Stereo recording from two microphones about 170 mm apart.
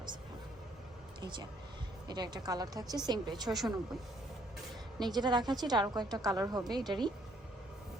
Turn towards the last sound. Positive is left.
turn(degrees=-25)  # may be behind; listen again after turning